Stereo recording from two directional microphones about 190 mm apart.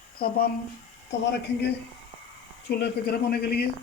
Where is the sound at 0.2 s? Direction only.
50° left (ahead or behind).